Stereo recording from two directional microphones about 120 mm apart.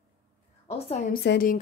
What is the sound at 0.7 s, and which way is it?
Speech, 75° left (ahead or behind).